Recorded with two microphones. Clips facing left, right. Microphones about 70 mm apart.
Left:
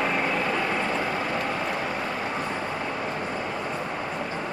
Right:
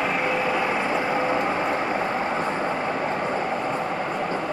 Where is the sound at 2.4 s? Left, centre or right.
Right.